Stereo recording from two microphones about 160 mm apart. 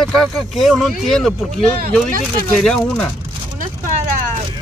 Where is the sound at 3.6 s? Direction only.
50° right (ahead or behind).